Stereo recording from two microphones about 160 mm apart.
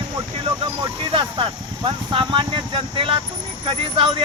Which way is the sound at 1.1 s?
30° right (ahead or behind).